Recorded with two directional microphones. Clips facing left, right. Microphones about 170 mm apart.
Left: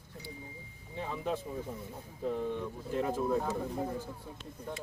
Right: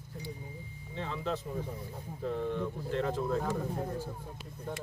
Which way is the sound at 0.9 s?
10° left (ahead or behind).